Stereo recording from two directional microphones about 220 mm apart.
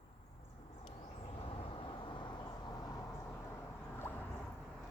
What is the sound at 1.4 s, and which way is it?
Vehicle, 25° left (ahead or behind).